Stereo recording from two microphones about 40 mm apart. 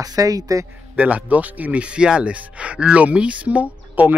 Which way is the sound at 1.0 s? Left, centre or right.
Right.